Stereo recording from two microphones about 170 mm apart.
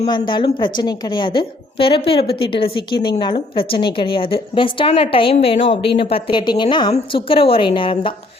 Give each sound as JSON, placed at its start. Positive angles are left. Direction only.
{"t": 0.1, "sound": "a woman's voice", "side_deg": 30}